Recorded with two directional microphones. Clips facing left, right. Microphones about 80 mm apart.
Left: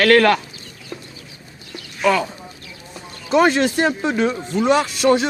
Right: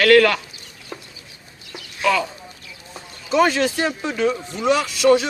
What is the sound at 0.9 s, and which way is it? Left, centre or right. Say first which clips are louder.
Chicken: left 2 dB; centre.